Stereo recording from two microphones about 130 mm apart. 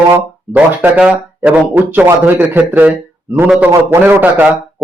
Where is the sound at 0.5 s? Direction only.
10° right (ahead or behind).